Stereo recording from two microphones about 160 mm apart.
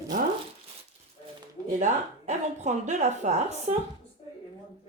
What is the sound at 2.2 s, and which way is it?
Speech, 45° right (ahead or behind).